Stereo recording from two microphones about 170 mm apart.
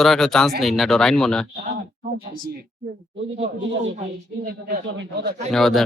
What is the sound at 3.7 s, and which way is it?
Speech, 90° right.